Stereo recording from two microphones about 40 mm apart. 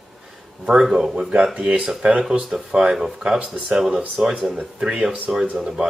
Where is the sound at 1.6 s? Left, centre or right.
Right.